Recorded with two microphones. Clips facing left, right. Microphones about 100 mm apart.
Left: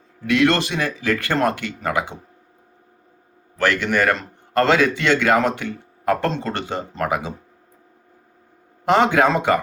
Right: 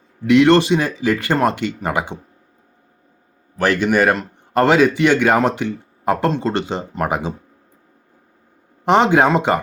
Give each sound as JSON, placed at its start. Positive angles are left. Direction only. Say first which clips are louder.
{"t": 0.3, "sound": "speech", "louder": "right 6 dB", "side_deg": -20}
{"t": 3.6, "sound": "speech", "louder": "right 3 dB", "side_deg": -15}
{"t": 8.8, "sound": "speech", "louder": "right 2 dB", "side_deg": -20}